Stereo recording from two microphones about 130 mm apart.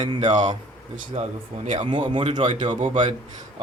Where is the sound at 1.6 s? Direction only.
75° right (ahead or behind).